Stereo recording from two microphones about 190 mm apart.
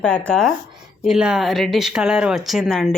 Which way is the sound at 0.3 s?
Centre (ahead or behind).